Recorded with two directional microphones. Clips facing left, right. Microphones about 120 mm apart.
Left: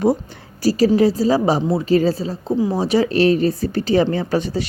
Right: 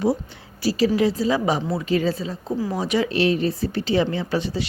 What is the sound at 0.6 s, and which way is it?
A woman's voice, 40° left (ahead or behind).